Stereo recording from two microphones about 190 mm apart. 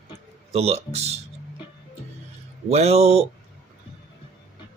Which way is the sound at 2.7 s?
35° right (ahead or behind).